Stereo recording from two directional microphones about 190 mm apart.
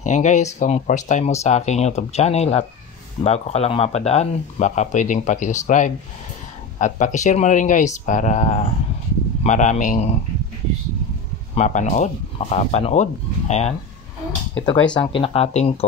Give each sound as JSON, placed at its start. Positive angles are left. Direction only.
{"t": 0.0, "sound": "speech", "side_deg": 40}
{"t": 11.5, "sound": "speech", "side_deg": 40}